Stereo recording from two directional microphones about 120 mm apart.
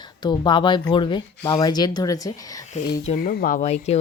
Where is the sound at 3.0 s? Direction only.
70° left (ahead or behind).